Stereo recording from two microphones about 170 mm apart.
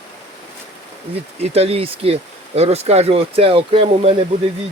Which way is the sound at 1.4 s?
35° right (ahead or behind).